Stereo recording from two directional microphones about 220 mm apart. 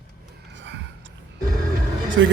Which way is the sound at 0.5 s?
55° right (ahead or behind).